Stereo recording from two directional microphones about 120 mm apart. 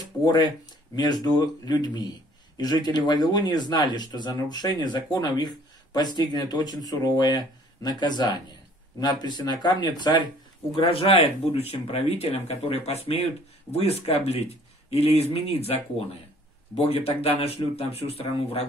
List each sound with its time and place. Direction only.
0.0 s a sound: 35° left (ahead or behind)
0.9 s speech: 35° left (ahead or behind)
10.8 s speech: 50° left (ahead or behind)
16.7 s speech: 55° left (ahead or behind)